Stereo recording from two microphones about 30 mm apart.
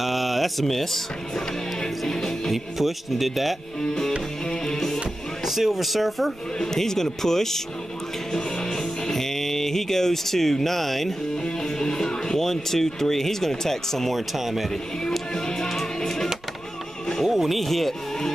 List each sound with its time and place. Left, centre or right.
0.0 s a sound: centre
0.7 s speech: centre
1.3 s music: centre
2.5 s a man's voice: centre
4.5 s music: centre
5.4 s a man's voice: centre
6.6 s speech: centre
8.3 s music: left
8.7 s music: centre
11.4 s speech: centre
14.1 s a man's voice: centre
15.3 s music: left
17.3 s speech: centre